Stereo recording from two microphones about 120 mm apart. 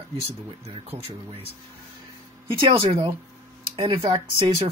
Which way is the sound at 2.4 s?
50° right (ahead or behind).